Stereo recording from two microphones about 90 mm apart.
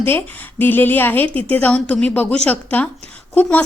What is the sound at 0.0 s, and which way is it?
A woman's voice, 25° left (ahead or behind).